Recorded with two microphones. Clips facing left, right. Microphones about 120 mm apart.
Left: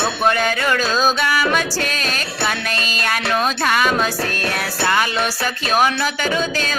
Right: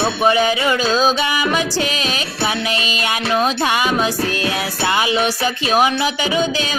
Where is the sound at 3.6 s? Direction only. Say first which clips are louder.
Even; 10° right (ahead or behind).